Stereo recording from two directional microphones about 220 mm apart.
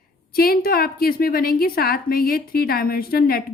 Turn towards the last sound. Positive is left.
turn(degrees=45)  # may be behind; listen again after turning